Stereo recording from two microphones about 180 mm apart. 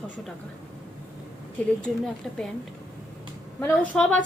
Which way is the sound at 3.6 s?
5° left (ahead or behind).